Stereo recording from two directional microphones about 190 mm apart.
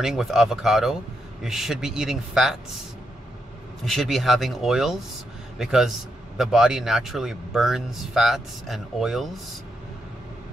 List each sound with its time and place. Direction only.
0.0 s a man's voice: centre (ahead or behind)
3.8 s a man's voice: centre (ahead or behind)